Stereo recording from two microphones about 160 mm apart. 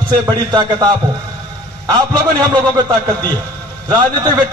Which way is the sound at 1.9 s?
30° right (ahead or behind).